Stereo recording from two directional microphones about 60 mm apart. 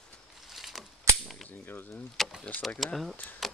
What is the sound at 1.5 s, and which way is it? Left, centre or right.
Speech, left.